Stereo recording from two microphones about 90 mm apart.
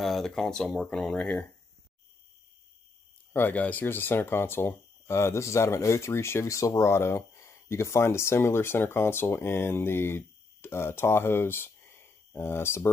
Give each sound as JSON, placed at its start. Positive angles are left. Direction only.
{"t": 0.0, "sound": "speech", "side_deg": 5}
{"t": 3.3, "sound": "speech", "side_deg": 20}